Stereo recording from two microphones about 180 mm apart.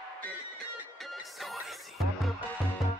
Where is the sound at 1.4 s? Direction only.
Centre (ahead or behind).